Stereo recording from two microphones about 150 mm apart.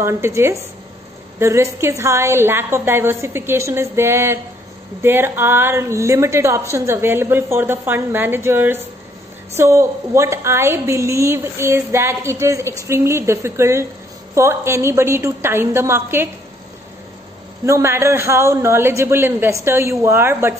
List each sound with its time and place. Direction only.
0.0 s a woman's voice: 15° right (ahead or behind)
17.6 s a woman's voice: 20° right (ahead or behind)